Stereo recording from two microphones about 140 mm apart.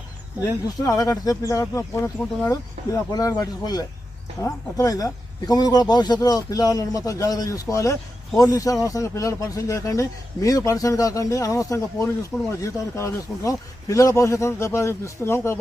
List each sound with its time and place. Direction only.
0.4 s speech: 25° left (ahead or behind)